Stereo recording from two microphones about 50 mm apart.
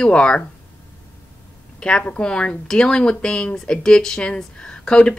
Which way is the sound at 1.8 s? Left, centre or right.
Centre.